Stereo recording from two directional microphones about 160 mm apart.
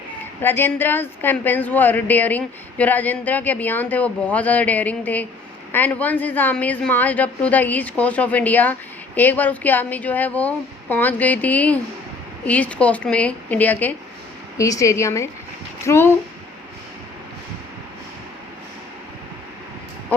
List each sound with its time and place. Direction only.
0.4 s a woman's voice: 15° left (ahead or behind)